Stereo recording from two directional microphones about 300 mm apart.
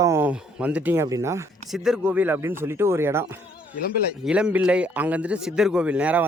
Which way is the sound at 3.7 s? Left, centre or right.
Left.